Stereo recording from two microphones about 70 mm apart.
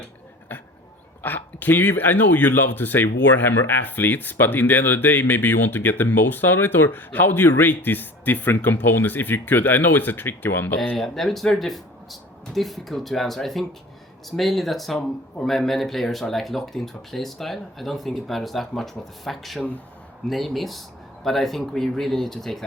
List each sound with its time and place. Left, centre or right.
1.2 s speech: left
10.9 s speech: centre